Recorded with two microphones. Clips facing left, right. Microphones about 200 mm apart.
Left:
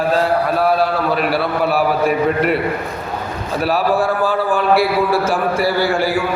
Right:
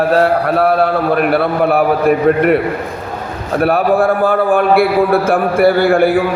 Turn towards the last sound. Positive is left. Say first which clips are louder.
# right 6 dB
turn(degrees=-55)  # may be behind; listen again after turning